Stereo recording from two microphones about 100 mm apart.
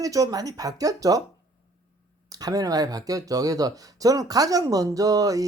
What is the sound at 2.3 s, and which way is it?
Speech, 40° right (ahead or behind).